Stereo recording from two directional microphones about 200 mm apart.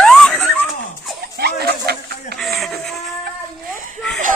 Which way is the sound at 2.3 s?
Centre (ahead or behind).